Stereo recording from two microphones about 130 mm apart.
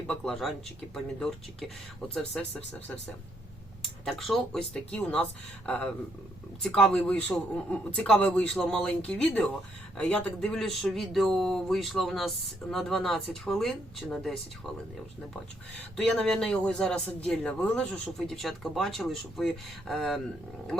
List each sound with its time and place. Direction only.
0.1 s a man's voice: 5° left (ahead or behind)
4.0 s a man's voice: centre (ahead or behind)
16.0 s a man's voice: 5° left (ahead or behind)